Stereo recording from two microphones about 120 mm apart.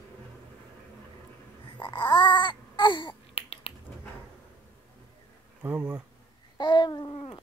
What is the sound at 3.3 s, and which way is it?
Finger snapping, 55° left (ahead or behind).